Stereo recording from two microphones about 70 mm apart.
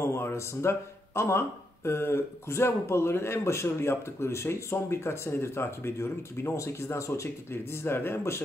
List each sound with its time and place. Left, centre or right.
0.0 s speech: left
7.5 s speech: left